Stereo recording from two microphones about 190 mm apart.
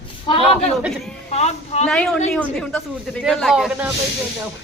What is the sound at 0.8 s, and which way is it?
Speech, centre (ahead or behind).